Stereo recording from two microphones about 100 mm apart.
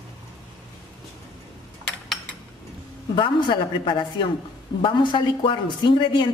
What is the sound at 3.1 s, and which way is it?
Speech, 50° left (ahead or behind).